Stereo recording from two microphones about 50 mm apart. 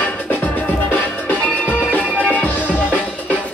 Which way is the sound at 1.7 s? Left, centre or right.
Left.